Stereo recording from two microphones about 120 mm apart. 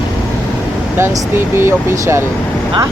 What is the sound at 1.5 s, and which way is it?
Speech, 20° right (ahead or behind).